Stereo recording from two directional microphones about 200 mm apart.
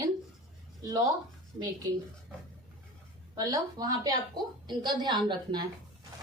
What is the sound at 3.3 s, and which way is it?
A woman's voice, 20° right (ahead or behind).